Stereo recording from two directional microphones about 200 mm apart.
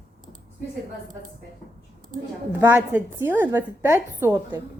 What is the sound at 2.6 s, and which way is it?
A woman's voice, 10° right (ahead or behind).